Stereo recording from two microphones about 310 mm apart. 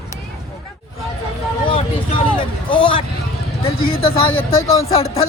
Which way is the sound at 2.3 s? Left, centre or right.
Centre.